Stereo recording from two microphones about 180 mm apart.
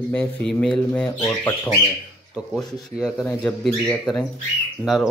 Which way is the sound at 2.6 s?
Centre (ahead or behind).